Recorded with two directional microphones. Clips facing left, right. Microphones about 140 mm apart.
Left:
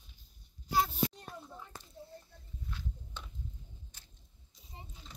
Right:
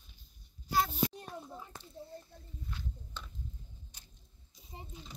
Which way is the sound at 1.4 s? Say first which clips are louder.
Right 2 dB; 15° right (ahead or behind).